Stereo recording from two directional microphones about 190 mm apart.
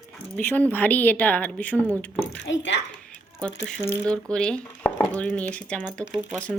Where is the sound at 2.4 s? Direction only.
70° left (ahead or behind).